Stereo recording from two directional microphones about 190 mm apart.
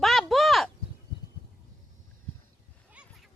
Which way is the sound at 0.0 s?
Centre (ahead or behind).